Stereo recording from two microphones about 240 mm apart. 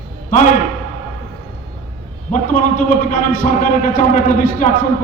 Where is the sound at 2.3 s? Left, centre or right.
Left.